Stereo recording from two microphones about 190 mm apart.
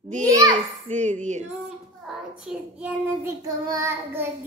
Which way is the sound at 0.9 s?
40° right (ahead or behind).